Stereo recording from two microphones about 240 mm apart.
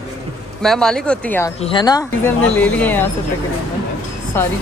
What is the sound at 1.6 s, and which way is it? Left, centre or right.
Speech, centre.